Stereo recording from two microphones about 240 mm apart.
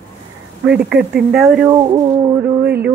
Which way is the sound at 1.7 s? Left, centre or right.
Centre.